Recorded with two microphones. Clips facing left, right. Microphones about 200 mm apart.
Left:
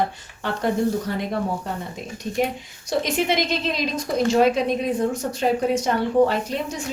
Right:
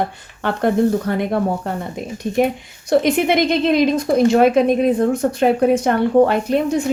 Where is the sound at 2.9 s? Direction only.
55° right (ahead or behind).